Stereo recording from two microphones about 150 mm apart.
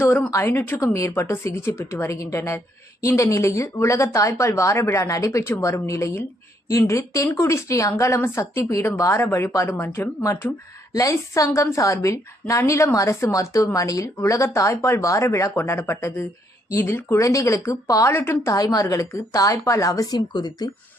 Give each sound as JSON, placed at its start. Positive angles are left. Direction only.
{"t": 0.0, "sound": "a woman's voice", "side_deg": 15}